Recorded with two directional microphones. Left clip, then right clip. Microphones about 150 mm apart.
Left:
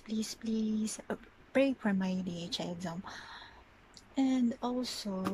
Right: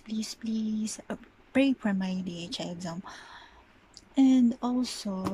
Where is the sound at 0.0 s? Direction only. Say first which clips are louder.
Right 2 dB; centre (ahead or behind).